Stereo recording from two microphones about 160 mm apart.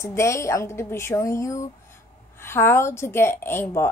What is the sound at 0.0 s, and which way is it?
Speech, 20° left (ahead or behind).